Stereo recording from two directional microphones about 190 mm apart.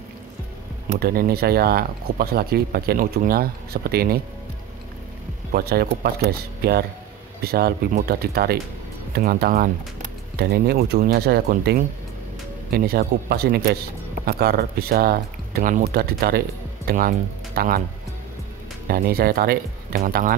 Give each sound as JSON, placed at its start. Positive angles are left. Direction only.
{"t": 0.9, "sound": "speech", "side_deg": -50}
{"t": 5.5, "sound": "speech", "side_deg": -55}
{"t": 18.9, "sound": "speech", "side_deg": -50}